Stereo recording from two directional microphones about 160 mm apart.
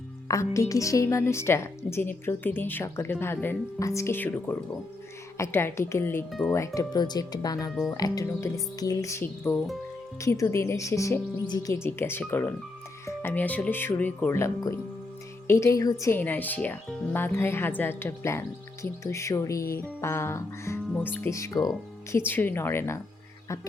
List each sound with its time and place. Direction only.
0.3 s a woman's voice: 20° left (ahead or behind)